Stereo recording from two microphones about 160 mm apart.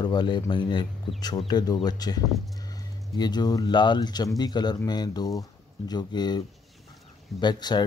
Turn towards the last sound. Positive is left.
turn(degrees=25)  # may be behind; listen again after turning